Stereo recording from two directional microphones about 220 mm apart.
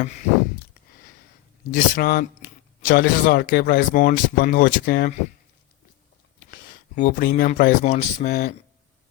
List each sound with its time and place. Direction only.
1.7 s speech: 40° left (ahead or behind)
6.9 s speech: 35° left (ahead or behind)